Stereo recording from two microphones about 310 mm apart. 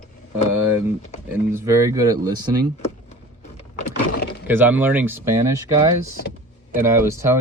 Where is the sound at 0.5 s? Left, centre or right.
Centre.